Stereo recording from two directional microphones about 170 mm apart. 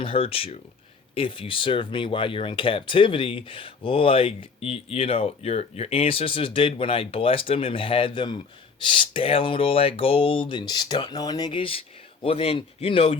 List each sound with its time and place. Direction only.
0.0 s speech: 30° left (ahead or behind)